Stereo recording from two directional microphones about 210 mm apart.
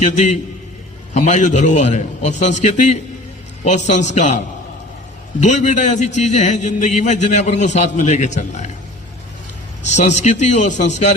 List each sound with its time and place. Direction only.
0.0 s a man's voice: 35° left (ahead or behind)
5.4 s a man's voice: 35° left (ahead or behind)
9.8 s a man's voice: 35° left (ahead or behind)